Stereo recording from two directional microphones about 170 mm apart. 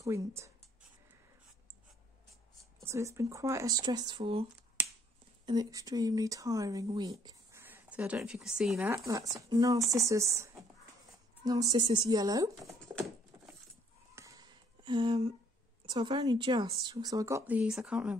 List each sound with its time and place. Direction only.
0.0 s speech: 15° right (ahead or behind)
2.8 s speech: 15° right (ahead or behind)
4.2 s speech: 35° right (ahead or behind)
5.4 s speech: 25° right (ahead or behind); by 8.9 s 5° right (ahead or behind)
8.9 s speech: 20° right (ahead or behind)
14.1 s a sound: 20° right (ahead or behind)
15.8 s speech: 30° right (ahead or behind); by 18.1 s 5° right (ahead or behind)